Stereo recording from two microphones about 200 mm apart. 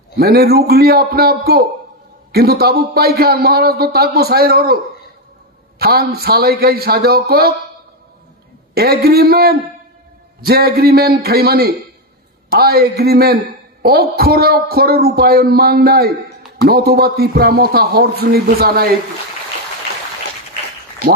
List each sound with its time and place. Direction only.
0.2 s a man's voice: 50° right (ahead or behind)
5.8 s a man's voice: 50° right (ahead or behind)
8.7 s a man's voice: 50° right (ahead or behind)